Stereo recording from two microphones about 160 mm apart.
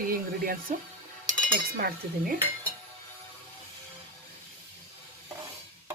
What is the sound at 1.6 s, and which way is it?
Speech, 65° right (ahead or behind).